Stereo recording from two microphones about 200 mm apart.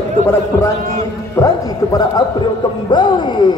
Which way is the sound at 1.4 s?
20° left (ahead or behind).